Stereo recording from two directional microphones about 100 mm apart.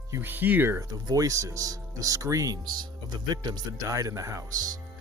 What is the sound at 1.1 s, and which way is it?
Speech, 35° right (ahead or behind).